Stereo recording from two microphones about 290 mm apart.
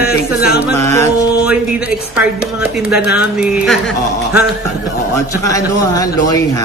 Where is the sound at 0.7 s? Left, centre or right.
Centre.